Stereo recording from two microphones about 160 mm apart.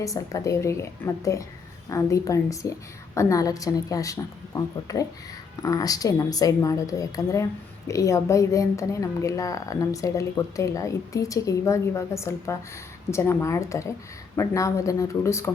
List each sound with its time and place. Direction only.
0.0 s a woman's voice: 20° left (ahead or behind)